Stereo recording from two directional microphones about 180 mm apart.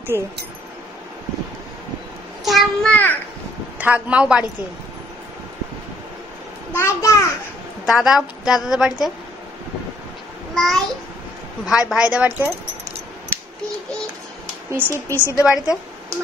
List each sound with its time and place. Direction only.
0.1 s a man's voice: 15° right (ahead or behind)
2.4 s a sound: centre (ahead or behind)
3.7 s a man's voice: 10° right (ahead or behind)
6.7 s a child's voice: 15° left (ahead or behind)
7.8 s a woman's voice: centre (ahead or behind)
10.5 s a sound: centre (ahead or behind)
11.6 s a woman's voice: 5° right (ahead or behind)
14.9 s a child's voice: 15° left (ahead or behind)
15.4 s a woman's voice: 5° right (ahead or behind)